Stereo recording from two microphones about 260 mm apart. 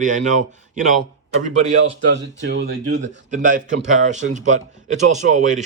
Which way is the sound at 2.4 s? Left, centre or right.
Right.